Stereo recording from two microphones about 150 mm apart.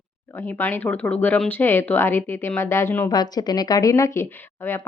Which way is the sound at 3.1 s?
25° left (ahead or behind).